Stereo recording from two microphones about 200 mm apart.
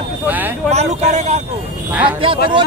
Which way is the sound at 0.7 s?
35° right (ahead or behind).